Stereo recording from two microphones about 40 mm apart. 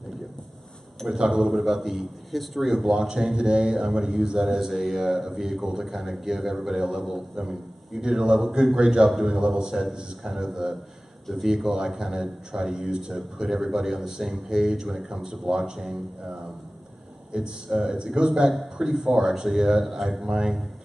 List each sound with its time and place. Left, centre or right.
1.0 s speech: centre
1.5 s a man's voice: centre
2.7 s a man's voice: centre
17.3 s speech: right